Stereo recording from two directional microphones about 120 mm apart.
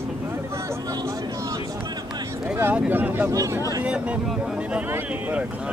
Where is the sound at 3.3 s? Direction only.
30° right (ahead or behind).